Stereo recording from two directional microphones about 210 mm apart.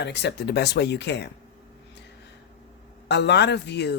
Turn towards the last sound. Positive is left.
turn(degrees=55)  # may be behind; listen again after turning